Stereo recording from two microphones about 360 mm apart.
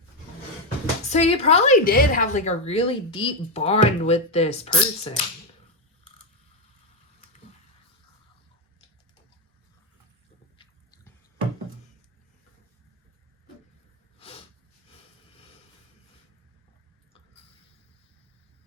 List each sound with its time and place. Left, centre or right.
1.0 s a woman's voice: centre
14.2 s snort: centre